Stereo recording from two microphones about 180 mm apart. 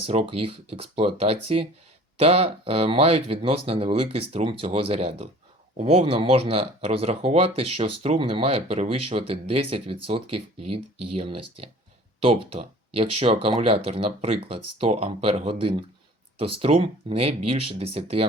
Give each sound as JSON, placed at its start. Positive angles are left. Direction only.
{"t": 0.0, "sound": "speech", "side_deg": -30}